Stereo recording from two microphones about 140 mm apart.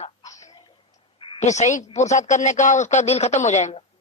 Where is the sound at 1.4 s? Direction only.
55° left (ahead or behind).